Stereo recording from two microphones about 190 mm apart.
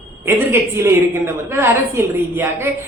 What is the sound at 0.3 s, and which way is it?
A woman's voice, 15° right (ahead or behind).